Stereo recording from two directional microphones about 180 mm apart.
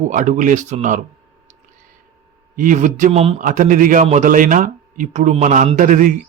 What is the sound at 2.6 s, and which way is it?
A man's voice, 45° right (ahead or behind).